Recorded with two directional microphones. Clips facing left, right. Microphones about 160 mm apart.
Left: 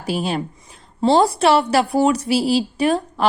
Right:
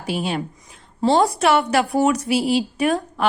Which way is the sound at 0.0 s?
35° left (ahead or behind).